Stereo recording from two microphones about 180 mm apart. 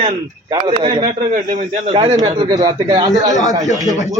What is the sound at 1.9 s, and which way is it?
Speech, 25° right (ahead or behind).